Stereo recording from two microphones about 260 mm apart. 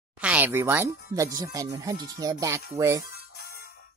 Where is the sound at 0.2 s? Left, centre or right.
Centre.